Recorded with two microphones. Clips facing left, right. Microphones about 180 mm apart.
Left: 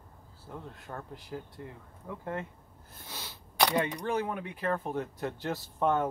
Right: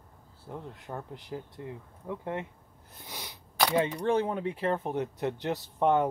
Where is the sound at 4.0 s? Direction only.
30° right (ahead or behind).